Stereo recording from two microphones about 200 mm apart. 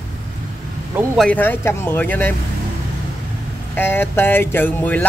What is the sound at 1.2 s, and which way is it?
Speech, 5° left (ahead or behind).